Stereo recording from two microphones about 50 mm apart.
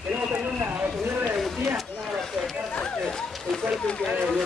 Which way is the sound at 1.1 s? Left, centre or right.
Right.